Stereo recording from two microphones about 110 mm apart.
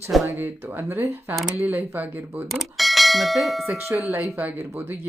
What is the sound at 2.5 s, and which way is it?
Speech, centre (ahead or behind).